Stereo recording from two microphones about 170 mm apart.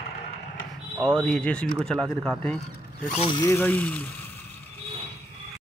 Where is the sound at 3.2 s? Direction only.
30° left (ahead or behind).